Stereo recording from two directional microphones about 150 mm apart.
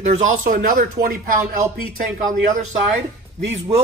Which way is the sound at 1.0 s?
80° right.